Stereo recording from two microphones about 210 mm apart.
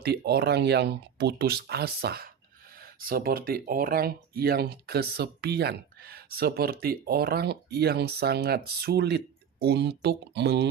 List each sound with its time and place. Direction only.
0.0 s speech: 50° right (ahead or behind)